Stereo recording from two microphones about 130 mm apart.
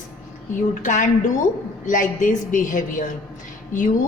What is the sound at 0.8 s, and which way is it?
A woman's voice, 75° left (ahead or behind).